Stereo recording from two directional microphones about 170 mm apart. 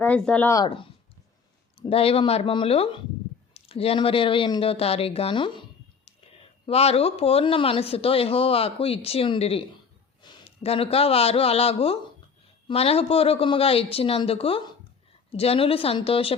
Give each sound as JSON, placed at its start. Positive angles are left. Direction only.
{"t": 0.0, "sound": "speech", "side_deg": 10}
{"t": 0.5, "sound": "speech", "side_deg": 25}
{"t": 6.7, "sound": "speech", "side_deg": 35}